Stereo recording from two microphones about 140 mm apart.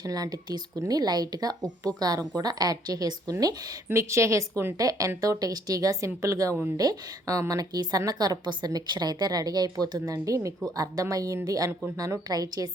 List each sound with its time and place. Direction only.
0.0 s a woman's voice: 25° right (ahead or behind)